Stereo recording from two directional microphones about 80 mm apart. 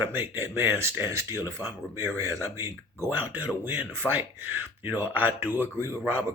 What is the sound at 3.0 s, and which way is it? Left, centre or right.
Speech, right.